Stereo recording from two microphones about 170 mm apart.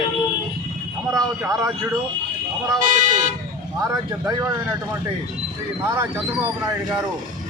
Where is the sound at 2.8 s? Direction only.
50° right (ahead or behind).